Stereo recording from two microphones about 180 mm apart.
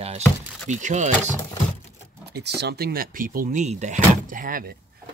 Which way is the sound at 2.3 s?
65° right (ahead or behind).